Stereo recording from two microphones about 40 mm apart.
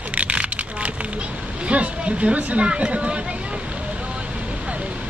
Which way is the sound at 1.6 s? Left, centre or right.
Right.